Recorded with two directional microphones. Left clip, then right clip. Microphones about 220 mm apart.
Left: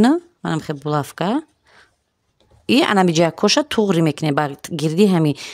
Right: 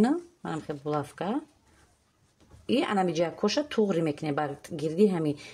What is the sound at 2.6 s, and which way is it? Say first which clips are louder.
Speech: left 11 dB; 45° left (ahead or behind).